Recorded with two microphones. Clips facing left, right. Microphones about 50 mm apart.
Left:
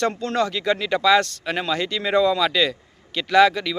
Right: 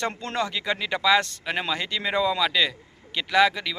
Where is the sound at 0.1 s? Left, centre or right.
Right.